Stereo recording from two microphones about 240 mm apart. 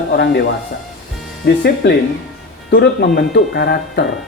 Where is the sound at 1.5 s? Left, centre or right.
Left.